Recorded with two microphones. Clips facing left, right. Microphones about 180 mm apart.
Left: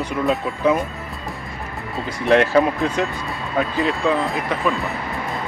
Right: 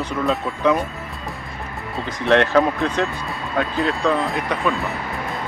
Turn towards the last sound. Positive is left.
turn(degrees=0)  # may be behind; listen again after turning